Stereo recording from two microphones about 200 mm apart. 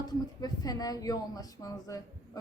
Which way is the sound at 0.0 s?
20° left (ahead or behind).